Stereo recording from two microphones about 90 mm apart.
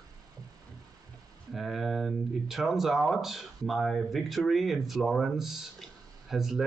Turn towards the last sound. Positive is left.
turn(degrees=-5)  # may be behind; listen again after turning